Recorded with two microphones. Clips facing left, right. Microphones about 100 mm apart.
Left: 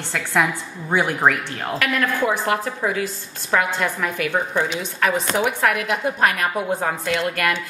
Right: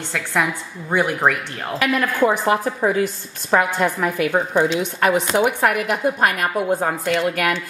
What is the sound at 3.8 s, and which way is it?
A woman's voice, 10° right (ahead or behind).